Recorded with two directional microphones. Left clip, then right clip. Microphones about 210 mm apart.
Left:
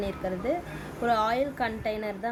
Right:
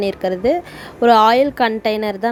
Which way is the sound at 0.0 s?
40° right (ahead or behind).